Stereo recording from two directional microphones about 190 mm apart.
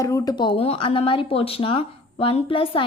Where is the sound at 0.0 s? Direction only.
15° left (ahead or behind).